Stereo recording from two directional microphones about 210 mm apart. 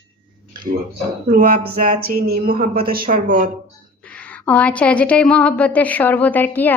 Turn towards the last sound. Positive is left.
turn(degrees=10)  # may be behind; listen again after turning